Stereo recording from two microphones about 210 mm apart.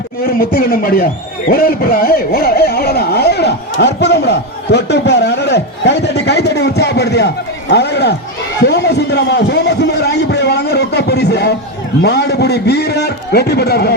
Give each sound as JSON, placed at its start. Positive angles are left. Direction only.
{"t": 0.3, "sound": "a man's voice", "side_deg": 45}
{"t": 8.6, "sound": "a sound", "side_deg": 50}
{"t": 12.0, "sound": "a man's voice", "side_deg": 50}